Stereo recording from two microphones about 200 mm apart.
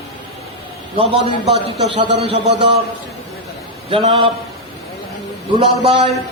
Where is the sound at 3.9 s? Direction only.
30° right (ahead or behind).